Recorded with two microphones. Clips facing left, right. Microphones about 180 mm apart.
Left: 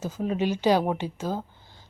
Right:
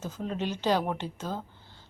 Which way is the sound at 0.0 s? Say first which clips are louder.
Left 6 dB; 10° left (ahead or behind).